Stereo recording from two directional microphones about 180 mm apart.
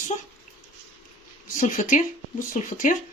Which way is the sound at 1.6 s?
45° left (ahead or behind).